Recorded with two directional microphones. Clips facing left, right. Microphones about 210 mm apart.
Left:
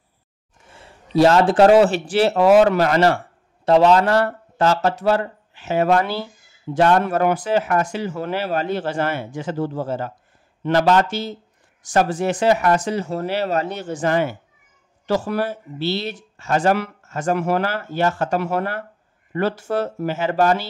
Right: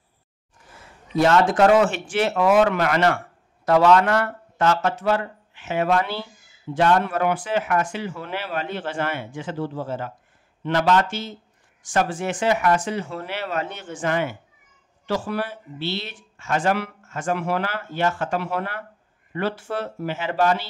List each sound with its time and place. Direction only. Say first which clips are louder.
0.7 s a man's voice: left 2 dB; 30° left (ahead or behind)